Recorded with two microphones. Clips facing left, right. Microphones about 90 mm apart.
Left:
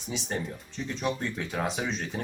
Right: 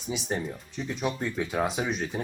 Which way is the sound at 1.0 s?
15° right (ahead or behind).